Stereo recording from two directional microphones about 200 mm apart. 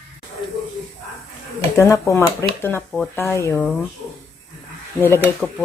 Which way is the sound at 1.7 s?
15° left (ahead or behind).